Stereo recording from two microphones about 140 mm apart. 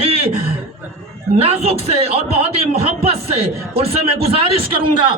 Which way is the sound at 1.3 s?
45° right (ahead or behind).